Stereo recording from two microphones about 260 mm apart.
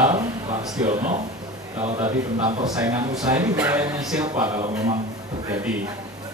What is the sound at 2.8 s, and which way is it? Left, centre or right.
Speech, centre.